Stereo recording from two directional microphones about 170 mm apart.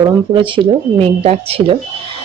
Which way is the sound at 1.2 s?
35° right (ahead or behind).